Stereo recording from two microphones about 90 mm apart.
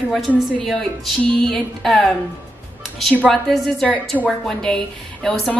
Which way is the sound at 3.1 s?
10° left (ahead or behind).